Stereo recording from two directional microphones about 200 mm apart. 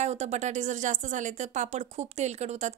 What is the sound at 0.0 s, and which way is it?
Speech, 35° right (ahead or behind).